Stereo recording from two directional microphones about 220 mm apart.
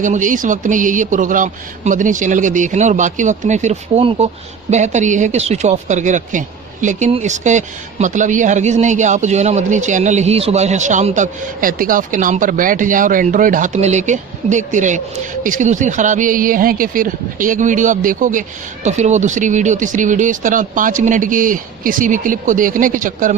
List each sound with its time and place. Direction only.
0.0 s speech: 35° right (ahead or behind)